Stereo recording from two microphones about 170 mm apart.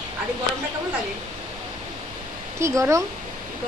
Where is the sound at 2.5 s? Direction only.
15° right (ahead or behind).